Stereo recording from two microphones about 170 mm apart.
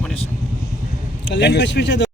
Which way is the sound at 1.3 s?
90° left.